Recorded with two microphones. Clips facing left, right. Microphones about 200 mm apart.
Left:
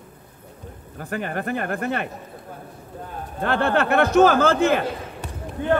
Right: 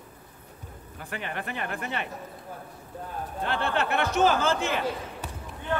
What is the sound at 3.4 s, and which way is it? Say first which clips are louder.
A man's voice: left 7 dB; 50° left (ahead or behind).